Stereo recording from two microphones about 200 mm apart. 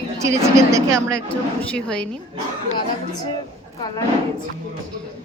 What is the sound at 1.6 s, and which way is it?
Speech, 5° left (ahead or behind).